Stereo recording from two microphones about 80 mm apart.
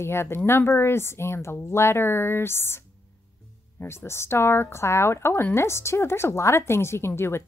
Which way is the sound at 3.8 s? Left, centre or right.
Left.